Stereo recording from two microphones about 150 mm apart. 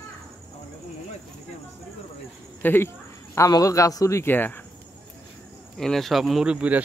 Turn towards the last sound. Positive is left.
turn(degrees=-10)  # may be behind; listen again after turning